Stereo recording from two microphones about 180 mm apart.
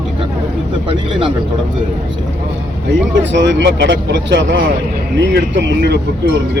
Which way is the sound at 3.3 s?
85° right.